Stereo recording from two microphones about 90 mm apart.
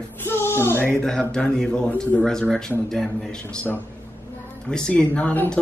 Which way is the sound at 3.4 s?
20° left (ahead or behind).